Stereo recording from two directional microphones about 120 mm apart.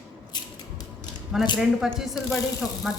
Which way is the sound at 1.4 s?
Centre (ahead or behind).